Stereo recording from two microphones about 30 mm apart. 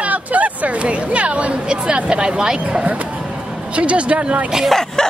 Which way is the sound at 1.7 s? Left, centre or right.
Right.